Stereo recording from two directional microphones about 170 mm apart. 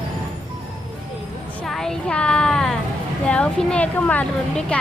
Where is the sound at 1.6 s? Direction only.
Centre (ahead or behind).